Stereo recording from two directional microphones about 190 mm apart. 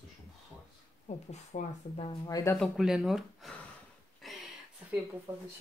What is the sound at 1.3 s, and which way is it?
Speech, 35° left (ahead or behind).